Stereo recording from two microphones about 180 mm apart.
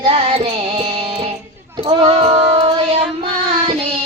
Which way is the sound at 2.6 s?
35° right (ahead or behind).